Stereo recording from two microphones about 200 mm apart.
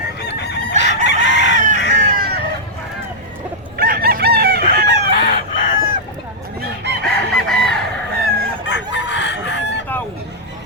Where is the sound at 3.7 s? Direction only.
50° right (ahead or behind).